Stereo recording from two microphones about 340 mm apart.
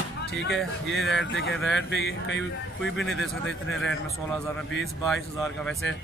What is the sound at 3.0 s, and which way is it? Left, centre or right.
Speech, centre.